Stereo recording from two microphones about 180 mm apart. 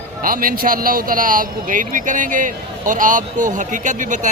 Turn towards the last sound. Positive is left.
turn(degrees=-45)  # may be behind; listen again after turning